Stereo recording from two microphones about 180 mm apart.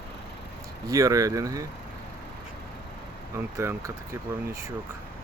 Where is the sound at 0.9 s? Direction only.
20° right (ahead or behind).